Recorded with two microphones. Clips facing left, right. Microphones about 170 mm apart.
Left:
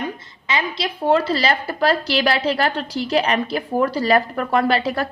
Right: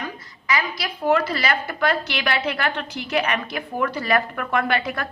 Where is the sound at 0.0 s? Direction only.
25° left (ahead or behind).